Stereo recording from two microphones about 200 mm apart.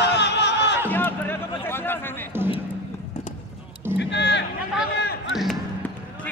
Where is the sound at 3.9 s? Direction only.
60° left (ahead or behind).